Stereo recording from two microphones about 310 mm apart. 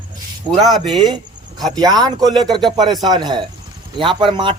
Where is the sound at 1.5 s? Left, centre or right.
Centre.